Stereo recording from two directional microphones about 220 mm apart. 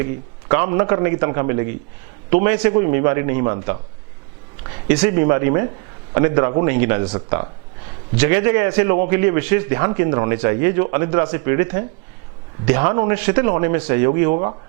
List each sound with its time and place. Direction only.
0.0 s a man's voice: 15° right (ahead or behind)